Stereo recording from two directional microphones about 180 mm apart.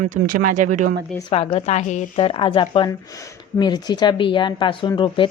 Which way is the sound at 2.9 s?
20° left (ahead or behind).